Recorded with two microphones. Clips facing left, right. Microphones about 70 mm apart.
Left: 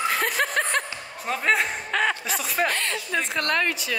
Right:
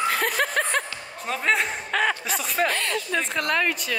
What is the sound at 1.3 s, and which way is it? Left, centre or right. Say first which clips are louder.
A woman's voice: left 1 dB; centre.